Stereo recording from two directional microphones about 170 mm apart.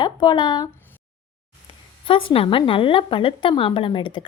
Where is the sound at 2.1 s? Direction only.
35° left (ahead or behind).